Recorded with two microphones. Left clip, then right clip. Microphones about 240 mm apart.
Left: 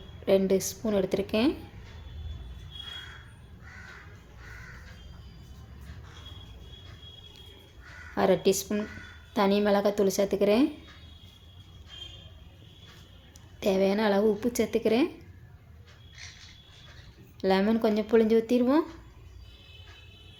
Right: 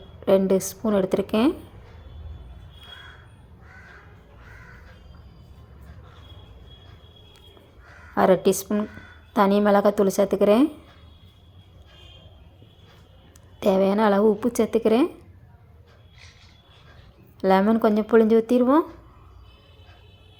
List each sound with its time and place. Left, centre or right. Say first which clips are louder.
0.3 s speech: right 5 dB; centre
8.1 s speech: right 6 dB; centre
13.6 s a woman's voice: right 6 dB; centre
17.4 s speech: right 6 dB; centre